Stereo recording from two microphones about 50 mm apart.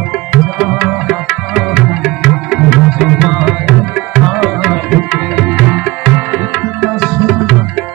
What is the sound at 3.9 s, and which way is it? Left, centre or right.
Tabla, centre.